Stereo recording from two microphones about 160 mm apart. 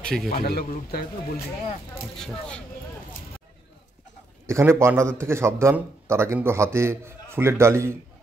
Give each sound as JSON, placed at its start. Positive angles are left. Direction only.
{"t": 0.0, "sound": "a man's voice", "side_deg": 5}
{"t": 0.3, "sound": "speech", "side_deg": 70}
{"t": 2.1, "sound": "speech", "side_deg": 5}
{"t": 4.5, "sound": "a man's voice", "side_deg": -15}